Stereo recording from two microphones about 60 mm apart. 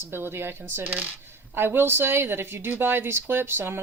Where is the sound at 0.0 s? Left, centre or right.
Right.